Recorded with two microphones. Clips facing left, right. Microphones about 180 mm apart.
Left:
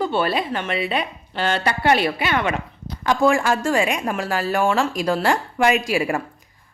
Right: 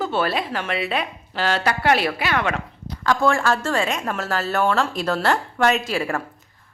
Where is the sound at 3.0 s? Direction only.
15° left (ahead or behind).